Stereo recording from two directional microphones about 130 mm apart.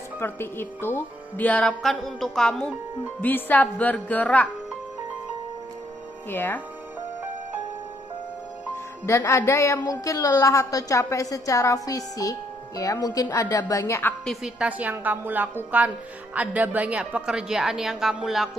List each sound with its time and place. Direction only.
0.2 s speech: 15° left (ahead or behind)
6.3 s speech: 15° left (ahead or behind)
9.0 s a woman's voice: 20° left (ahead or behind)
14.3 s a woman's voice: 5° right (ahead or behind)